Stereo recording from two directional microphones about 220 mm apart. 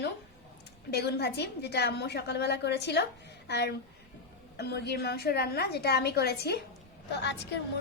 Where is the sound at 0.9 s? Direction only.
45° left (ahead or behind).